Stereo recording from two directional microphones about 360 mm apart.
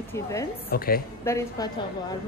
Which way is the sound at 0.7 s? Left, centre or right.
Left.